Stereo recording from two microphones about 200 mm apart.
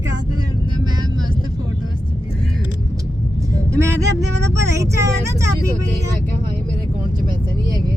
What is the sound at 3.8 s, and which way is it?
Speech, 15° right (ahead or behind).